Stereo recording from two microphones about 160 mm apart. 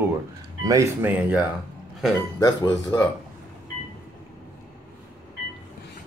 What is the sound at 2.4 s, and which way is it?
Speech, 25° left (ahead or behind).